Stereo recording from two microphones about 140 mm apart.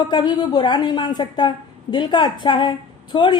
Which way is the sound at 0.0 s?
30° left (ahead or behind).